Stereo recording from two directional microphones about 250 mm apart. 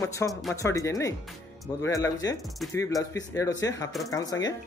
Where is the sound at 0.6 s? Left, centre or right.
Centre.